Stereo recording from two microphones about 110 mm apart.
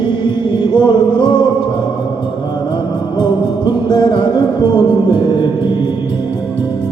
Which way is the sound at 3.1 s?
40° left (ahead or behind).